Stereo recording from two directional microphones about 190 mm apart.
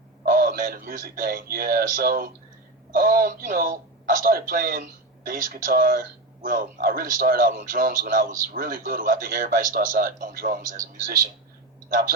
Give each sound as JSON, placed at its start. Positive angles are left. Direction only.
{"t": 0.3, "sound": "a man's voice", "side_deg": -50}
{"t": 11.9, "sound": "a man's voice", "side_deg": -50}